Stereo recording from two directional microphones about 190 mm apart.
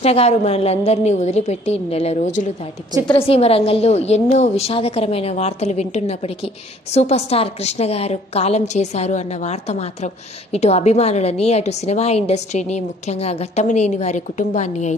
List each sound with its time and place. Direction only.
0.0 s a woman's voice: 35° left (ahead or behind)